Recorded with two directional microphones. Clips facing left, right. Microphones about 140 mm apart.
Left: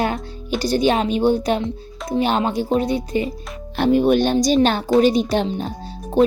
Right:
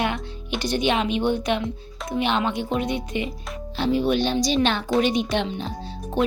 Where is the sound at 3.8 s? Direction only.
50° left (ahead or behind).